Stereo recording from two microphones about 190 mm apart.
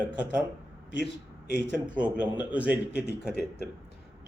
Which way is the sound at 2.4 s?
5° right (ahead or behind).